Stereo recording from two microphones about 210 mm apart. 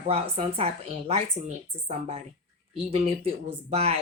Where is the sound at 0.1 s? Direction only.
30° right (ahead or behind).